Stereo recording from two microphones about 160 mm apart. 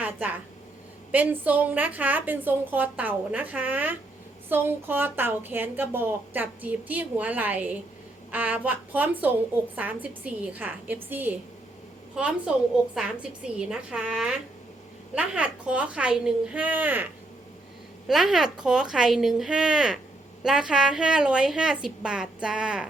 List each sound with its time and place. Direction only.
0.0 s a sound: 10° right (ahead or behind)
1.1 s a woman's voice: 10° right (ahead or behind)
12.9 s a woman's voice: 5° right (ahead or behind)
18.1 s a woman's voice: centre (ahead or behind)